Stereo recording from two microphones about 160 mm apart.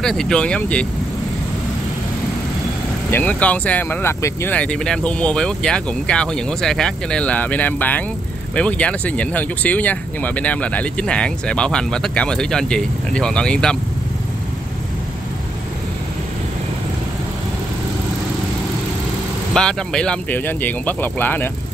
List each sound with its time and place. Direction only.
0.0 s speech: 5° left (ahead or behind)
3.1 s speech: 10° left (ahead or behind)
19.5 s speech: 5° left (ahead or behind)